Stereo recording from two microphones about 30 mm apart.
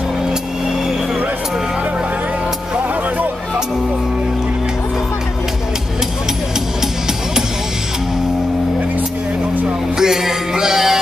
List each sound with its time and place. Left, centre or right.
9.9 s music: centre